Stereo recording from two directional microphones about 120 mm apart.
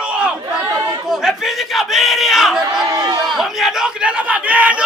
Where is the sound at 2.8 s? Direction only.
30° right (ahead or behind).